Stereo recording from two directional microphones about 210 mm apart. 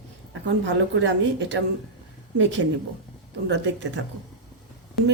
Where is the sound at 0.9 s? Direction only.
60° right (ahead or behind).